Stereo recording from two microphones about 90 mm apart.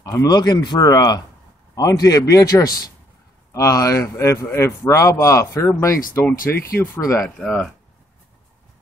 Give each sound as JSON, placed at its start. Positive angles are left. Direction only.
{"t": 0.0, "sound": "speech", "side_deg": 40}
{"t": 7.2, "sound": "speech", "side_deg": 10}